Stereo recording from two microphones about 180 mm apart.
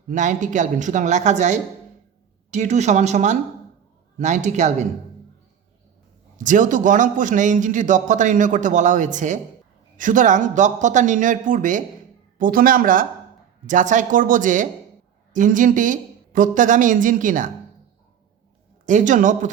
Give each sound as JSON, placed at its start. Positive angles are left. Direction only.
{"t": 0.1, "sound": "a man's voice", "side_deg": -45}
{"t": 6.3, "sound": "a man's voice", "side_deg": -45}
{"t": 18.9, "sound": "a man's voice", "side_deg": -45}